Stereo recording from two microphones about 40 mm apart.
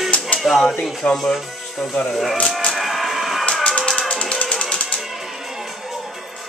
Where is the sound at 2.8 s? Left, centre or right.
Centre.